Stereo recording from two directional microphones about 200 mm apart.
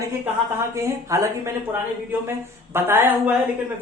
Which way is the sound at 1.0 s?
15° right (ahead or behind).